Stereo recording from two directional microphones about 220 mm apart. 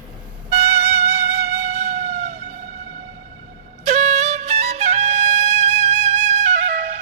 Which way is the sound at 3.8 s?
30° right (ahead or behind).